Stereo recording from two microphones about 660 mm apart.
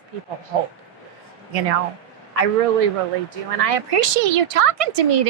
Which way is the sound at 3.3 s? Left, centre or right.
Right.